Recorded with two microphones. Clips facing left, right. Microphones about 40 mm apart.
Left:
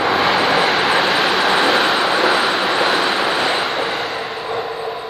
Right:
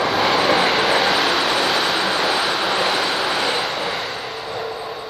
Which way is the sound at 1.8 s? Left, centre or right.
Centre.